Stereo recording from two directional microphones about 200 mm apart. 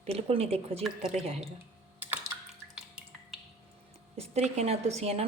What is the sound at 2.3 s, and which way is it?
Drip, 5° right (ahead or behind).